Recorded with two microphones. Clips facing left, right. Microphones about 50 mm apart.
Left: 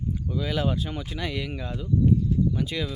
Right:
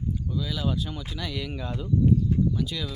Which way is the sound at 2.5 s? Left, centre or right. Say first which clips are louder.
Left 2 dB; left.